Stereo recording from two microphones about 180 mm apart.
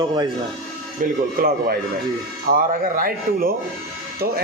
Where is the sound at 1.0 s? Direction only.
55° right (ahead or behind).